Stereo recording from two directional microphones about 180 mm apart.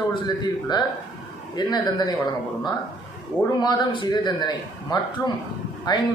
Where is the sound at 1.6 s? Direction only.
20° left (ahead or behind).